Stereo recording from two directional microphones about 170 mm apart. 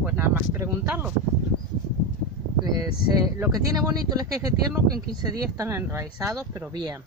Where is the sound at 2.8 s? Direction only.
20° right (ahead or behind).